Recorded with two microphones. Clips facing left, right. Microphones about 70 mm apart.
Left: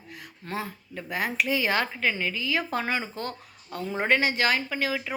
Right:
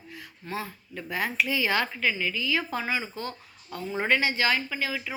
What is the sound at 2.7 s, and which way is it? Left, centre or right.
Speech, left.